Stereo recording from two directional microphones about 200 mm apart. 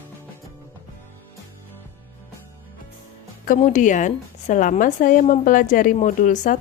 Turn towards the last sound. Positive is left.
turn(degrees=40)  # may be behind; listen again after turning